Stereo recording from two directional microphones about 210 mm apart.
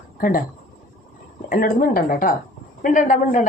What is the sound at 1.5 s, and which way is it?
Speech, 40° left (ahead or behind).